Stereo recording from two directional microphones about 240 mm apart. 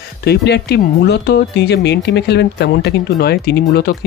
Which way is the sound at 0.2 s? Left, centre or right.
Left.